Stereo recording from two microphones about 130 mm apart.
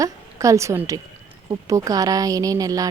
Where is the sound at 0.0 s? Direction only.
25° right (ahead or behind).